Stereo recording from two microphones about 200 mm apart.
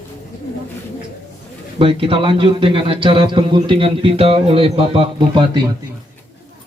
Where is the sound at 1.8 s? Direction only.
25° right (ahead or behind).